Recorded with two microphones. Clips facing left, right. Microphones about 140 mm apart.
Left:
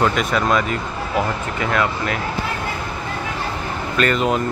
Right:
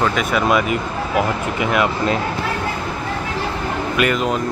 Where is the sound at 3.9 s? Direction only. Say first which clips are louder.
Even; 10° right (ahead or behind).